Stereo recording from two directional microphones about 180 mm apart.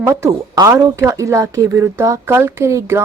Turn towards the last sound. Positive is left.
turn(degrees=-15)  # may be behind; listen again after turning